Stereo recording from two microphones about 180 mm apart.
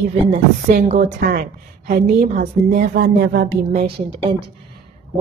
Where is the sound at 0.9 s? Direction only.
50° right (ahead or behind).